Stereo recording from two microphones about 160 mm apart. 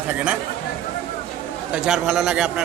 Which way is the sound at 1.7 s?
5° right (ahead or behind).